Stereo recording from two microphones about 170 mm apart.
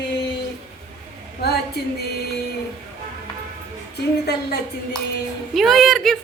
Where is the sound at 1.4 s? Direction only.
70° left (ahead or behind).